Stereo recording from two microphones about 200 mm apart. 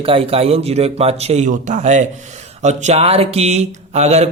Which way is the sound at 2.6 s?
35° right (ahead or behind).